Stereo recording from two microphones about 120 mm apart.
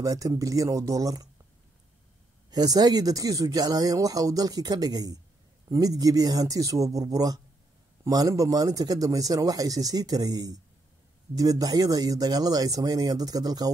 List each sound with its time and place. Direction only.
0.0 s speech: 30° right (ahead or behind)
2.5 s speech: 35° right (ahead or behind)